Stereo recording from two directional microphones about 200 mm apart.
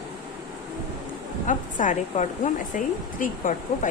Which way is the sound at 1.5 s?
40° left (ahead or behind).